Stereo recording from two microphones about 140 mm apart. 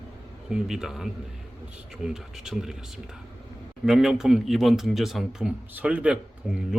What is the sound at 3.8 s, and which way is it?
A man's voice, 5° right (ahead or behind).